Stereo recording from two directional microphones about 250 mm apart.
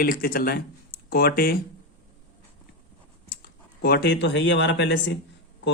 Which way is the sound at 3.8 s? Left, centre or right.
Left.